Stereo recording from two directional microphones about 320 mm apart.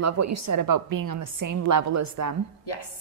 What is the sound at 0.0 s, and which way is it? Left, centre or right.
A woman's voice, right.